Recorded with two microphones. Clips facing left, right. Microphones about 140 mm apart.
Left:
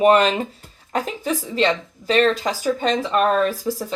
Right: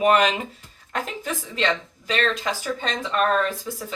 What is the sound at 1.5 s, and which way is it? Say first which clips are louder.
Speech: left 3 dB; 35° left (ahead or behind).